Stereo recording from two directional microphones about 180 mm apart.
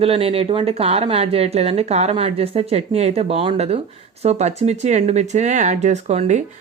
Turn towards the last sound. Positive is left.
turn(degrees=-40)  # may be behind; listen again after turning